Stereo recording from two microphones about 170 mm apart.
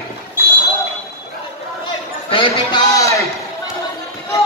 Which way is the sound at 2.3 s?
30° left (ahead or behind).